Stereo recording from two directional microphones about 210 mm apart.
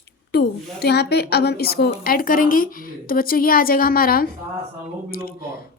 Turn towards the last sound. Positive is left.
turn(degrees=45)  # may be behind; listen again after turning